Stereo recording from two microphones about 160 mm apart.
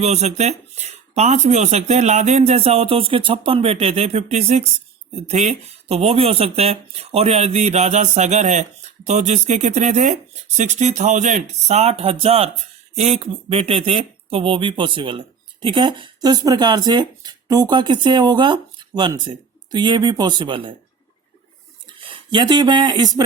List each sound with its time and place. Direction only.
0.0 s speech: 45° right (ahead or behind)
22.0 s speech: 30° right (ahead or behind)